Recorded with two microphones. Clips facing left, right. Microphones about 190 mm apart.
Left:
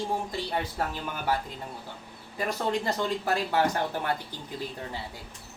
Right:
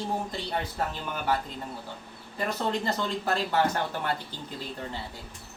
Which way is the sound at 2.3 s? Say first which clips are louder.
Left 1 dB; 10° left (ahead or behind).